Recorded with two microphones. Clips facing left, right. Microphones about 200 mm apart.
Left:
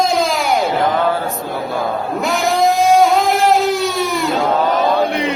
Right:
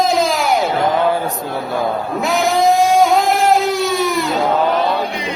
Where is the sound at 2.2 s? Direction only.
Centre (ahead or behind).